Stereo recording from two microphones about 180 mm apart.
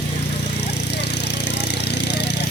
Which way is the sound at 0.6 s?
70° left (ahead or behind).